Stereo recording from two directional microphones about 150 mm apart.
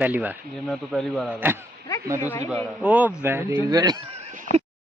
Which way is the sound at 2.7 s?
10° right (ahead or behind).